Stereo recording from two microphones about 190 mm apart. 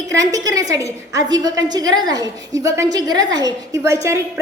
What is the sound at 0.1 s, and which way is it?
A woman's voice, 15° right (ahead or behind).